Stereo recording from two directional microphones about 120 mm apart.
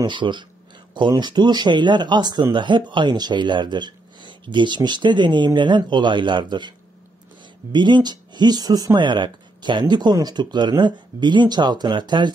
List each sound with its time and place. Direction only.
0.0 s speech: 40° right (ahead or behind)
7.7 s speech: 40° right (ahead or behind)